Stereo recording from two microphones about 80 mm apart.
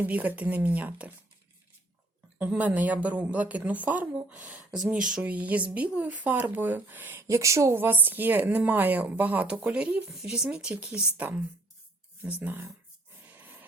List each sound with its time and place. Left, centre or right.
0.0 s speech: right
2.4 s speech: centre
5.0 s speech: centre
5.3 s speech: centre
7.3 s speech: right
7.8 s speech: right
13.2 s a sound: right